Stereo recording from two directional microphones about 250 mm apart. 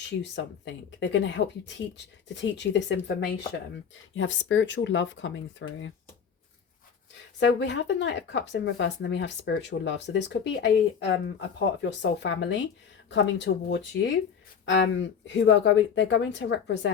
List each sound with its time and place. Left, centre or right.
0.2 s speech: left
7.3 s speech: left
14.6 s a sound: left
15.3 s speech: left